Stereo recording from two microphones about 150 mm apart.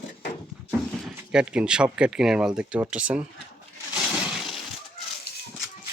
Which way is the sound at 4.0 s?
Centre (ahead or behind).